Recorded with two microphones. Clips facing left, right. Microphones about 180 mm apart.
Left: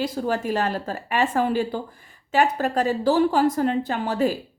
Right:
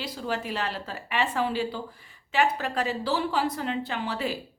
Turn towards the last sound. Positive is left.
turn(degrees=45)  # may be behind; listen again after turning